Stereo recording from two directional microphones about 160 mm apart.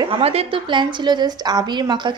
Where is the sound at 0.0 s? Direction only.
35° right (ahead or behind).